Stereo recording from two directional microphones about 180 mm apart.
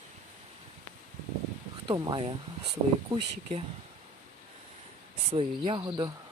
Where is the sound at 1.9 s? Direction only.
30° right (ahead or behind).